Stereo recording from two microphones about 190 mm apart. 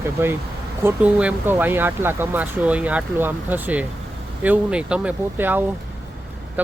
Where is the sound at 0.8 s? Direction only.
10° right (ahead or behind).